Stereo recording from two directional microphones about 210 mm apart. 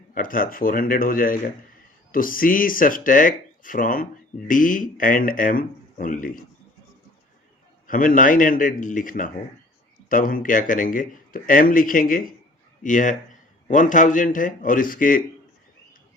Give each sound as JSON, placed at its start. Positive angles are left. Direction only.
{"t": 0.1, "sound": "speech", "side_deg": 40}
{"t": 7.9, "sound": "speech", "side_deg": 40}